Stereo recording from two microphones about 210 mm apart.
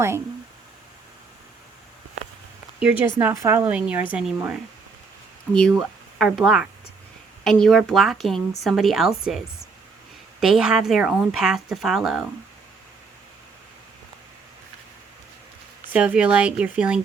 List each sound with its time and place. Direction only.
3.2 s a woman's voice: 10° right (ahead or behind)
5.5 s speech: centre (ahead or behind)
10.4 s speech: 5° right (ahead or behind)
15.9 s speech: 5° right (ahead or behind)